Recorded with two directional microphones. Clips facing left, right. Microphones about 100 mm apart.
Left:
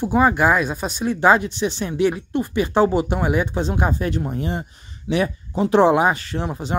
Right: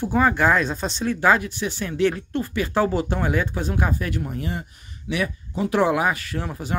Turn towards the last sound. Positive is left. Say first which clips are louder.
# left 3 dB
turn(degrees=25)  # may be behind; listen again after turning